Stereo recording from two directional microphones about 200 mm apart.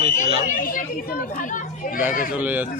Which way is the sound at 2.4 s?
10° right (ahead or behind).